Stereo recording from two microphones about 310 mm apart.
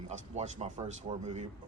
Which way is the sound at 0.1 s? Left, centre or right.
Right.